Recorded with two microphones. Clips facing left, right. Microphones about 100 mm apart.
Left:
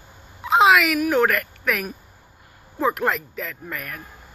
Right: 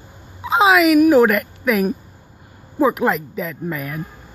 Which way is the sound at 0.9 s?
10° right (ahead or behind).